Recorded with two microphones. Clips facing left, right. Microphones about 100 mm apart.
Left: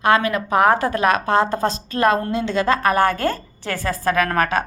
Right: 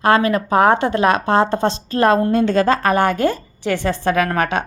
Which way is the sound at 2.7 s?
30° right (ahead or behind).